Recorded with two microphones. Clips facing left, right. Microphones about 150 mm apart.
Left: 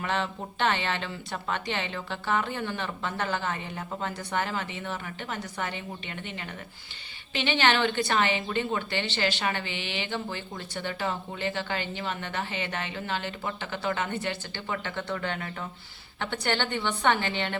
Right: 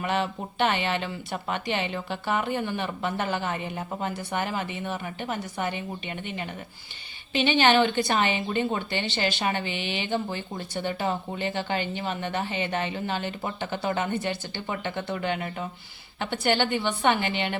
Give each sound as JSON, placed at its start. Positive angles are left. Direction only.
{"t": 0.0, "sound": "speech", "side_deg": -15}